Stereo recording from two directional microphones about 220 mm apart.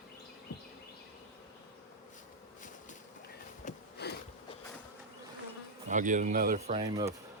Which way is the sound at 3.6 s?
35° left (ahead or behind).